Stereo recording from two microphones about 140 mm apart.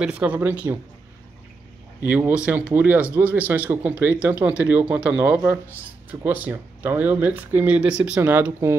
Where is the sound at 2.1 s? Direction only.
10° right (ahead or behind).